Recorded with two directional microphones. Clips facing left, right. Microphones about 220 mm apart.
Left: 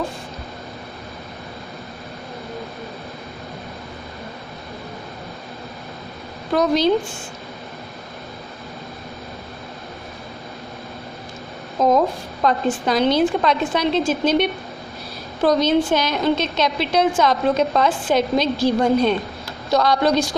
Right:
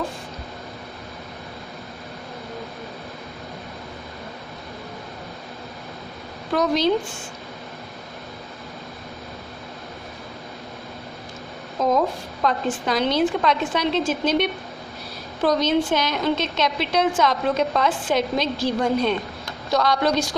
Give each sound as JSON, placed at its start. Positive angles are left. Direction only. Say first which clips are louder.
{"t": 6.5, "sound": "a woman's voice", "louder": "left 3 dB", "side_deg": 35}
{"t": 11.8, "sound": "a sound", "louder": "left 4 dB", "side_deg": 35}
{"t": 12.4, "sound": "a woman's voice", "louder": "left 4 dB", "side_deg": 35}